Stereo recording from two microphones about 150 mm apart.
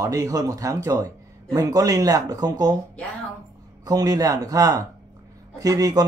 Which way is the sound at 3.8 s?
25° right (ahead or behind).